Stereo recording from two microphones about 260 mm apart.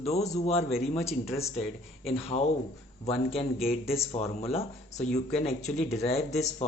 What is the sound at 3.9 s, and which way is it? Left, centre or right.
Speech, left.